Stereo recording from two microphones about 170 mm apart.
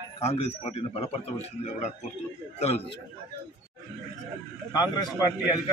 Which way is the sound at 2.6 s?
35° left (ahead or behind).